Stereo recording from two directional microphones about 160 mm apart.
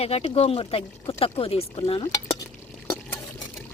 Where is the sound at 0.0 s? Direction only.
40° left (ahead or behind).